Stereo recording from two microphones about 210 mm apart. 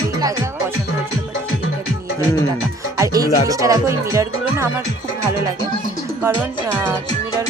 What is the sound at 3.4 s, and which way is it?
Speech, 15° right (ahead or behind).